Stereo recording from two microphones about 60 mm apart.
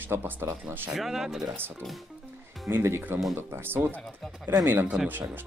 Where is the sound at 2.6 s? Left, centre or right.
Right.